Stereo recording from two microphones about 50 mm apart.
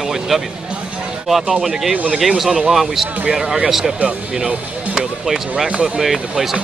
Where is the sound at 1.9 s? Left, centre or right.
Right.